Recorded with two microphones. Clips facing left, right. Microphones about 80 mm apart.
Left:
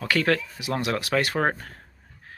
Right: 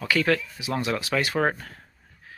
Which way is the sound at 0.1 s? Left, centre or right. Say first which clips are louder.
Even; left.